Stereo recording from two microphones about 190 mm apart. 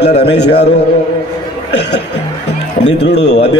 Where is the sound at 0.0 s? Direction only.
60° left (ahead or behind).